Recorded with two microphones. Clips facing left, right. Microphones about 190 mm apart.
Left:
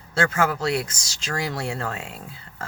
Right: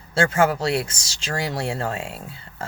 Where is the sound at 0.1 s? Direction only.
30° right (ahead or behind).